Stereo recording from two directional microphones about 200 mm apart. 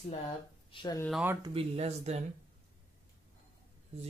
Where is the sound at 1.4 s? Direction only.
30° right (ahead or behind).